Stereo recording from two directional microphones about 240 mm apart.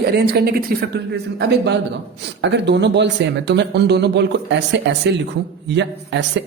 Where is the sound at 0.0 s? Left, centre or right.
Right.